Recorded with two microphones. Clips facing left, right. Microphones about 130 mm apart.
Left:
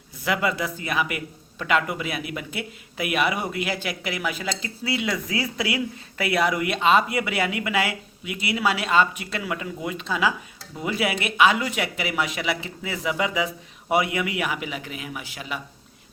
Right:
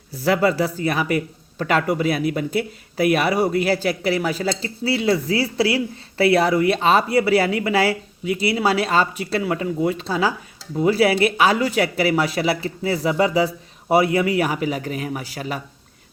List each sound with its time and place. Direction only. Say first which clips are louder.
0.1 s speech: right 6 dB; 35° right (ahead or behind)